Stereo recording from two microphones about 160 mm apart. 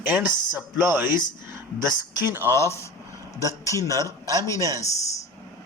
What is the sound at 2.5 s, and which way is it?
Speech, 15° left (ahead or behind).